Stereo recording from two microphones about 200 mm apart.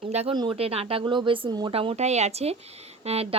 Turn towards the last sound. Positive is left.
turn(degrees=-30)  # may be behind; listen again after turning